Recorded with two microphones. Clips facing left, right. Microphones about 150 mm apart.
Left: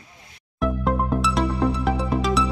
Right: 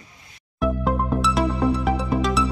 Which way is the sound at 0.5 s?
Centre (ahead or behind).